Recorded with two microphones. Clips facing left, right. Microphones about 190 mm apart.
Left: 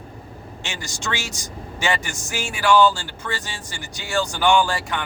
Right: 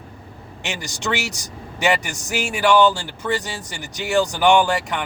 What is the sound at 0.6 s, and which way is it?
Speech, 15° right (ahead or behind).